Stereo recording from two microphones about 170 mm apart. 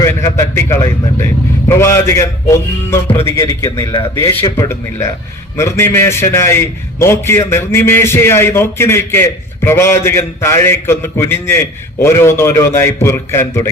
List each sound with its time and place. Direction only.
0.0 s a man's voice: 15° left (ahead or behind)